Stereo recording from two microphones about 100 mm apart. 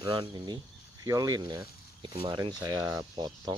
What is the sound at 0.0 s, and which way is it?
Speech, 55° right (ahead or behind).